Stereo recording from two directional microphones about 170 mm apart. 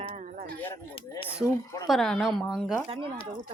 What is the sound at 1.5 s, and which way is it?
Speech, 20° left (ahead or behind).